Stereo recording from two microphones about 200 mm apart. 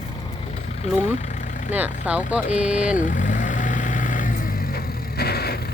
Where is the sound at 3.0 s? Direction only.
40° left (ahead or behind).